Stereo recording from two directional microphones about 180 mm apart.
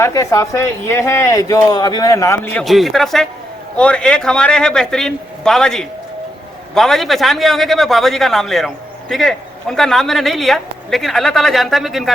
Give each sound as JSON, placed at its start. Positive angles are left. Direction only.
{"t": 0.0, "sound": "a man's voice", "side_deg": 20}